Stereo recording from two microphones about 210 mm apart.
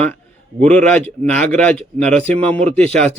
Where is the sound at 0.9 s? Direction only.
5° left (ahead or behind).